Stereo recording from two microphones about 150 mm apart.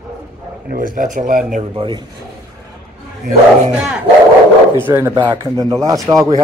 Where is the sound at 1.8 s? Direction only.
30° right (ahead or behind).